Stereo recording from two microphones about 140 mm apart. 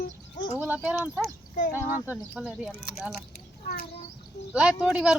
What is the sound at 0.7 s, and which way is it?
Speech, 10° right (ahead or behind).